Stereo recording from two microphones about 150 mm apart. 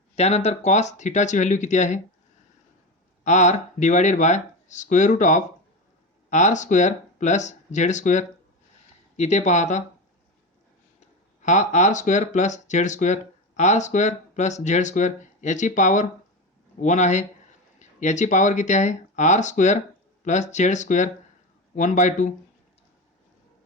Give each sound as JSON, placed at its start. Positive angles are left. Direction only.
{"t": 0.2, "sound": "speech", "side_deg": 45}
{"t": 3.2, "sound": "speech", "side_deg": 55}
{"t": 11.4, "sound": "speech", "side_deg": 55}